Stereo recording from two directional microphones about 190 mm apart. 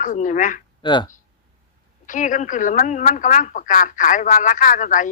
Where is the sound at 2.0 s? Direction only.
40° left (ahead or behind).